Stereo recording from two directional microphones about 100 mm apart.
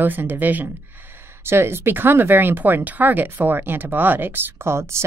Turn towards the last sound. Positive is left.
turn(degrees=-25)  # may be behind; listen again after turning